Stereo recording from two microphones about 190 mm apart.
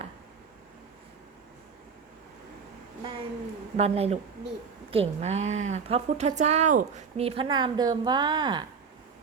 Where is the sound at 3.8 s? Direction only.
35° right (ahead or behind).